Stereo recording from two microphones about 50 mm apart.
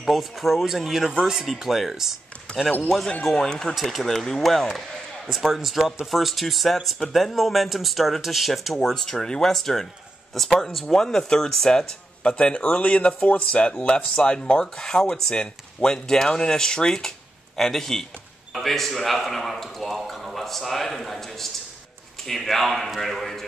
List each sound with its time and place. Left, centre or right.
0.0 s a man's voice: centre
1.5 s speech: centre
3.3 s a man's voice: centre
12.2 s a man's voice: left; by 23.4 s centre